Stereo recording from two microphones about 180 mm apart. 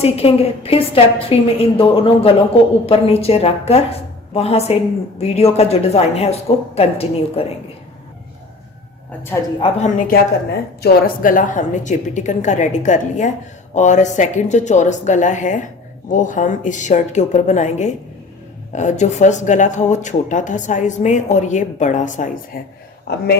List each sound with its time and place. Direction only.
0.0 s speech: 35° left (ahead or behind)
9.6 s a woman's voice: 25° left (ahead or behind)
10.8 s a woman's voice: 50° left (ahead or behind)